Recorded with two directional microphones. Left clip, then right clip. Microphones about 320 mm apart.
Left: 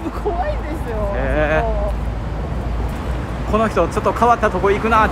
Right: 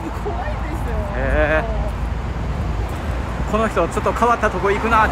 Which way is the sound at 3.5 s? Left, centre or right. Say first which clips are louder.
Left 2 dB; centre.